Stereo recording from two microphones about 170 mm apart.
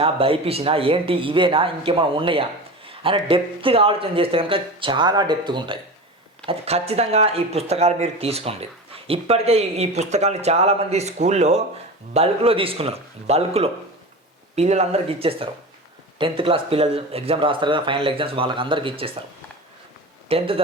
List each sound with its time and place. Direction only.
0.0 s speech: 35° right (ahead or behind)
20.2 s speech: 35° right (ahead or behind)